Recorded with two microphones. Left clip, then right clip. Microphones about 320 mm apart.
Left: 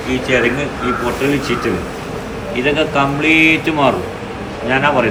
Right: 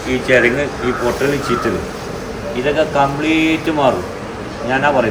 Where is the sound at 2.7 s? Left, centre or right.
Centre.